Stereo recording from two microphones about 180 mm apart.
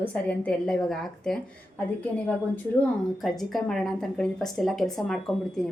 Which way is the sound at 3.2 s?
Centre (ahead or behind).